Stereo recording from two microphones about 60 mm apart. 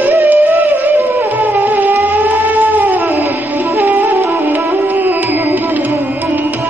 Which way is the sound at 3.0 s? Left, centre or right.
Right.